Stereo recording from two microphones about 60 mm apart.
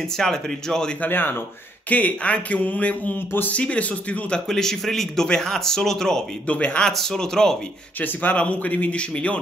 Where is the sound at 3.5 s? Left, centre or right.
Left.